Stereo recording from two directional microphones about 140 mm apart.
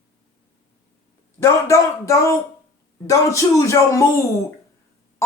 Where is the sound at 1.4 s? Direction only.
20° left (ahead or behind).